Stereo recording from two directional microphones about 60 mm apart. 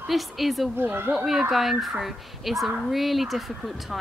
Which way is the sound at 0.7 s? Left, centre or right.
Right.